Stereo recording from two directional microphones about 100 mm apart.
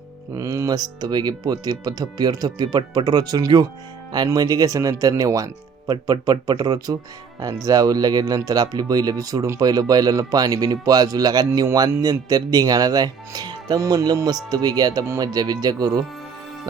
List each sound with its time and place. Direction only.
0.3 s speech: 35° right (ahead or behind)